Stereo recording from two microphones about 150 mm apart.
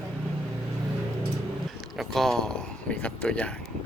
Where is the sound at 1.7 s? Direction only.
Centre (ahead or behind).